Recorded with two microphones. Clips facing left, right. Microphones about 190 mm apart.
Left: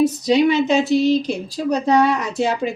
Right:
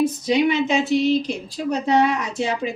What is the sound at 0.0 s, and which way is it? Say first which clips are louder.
Speech: left 3 dB; 35° left (ahead or behind).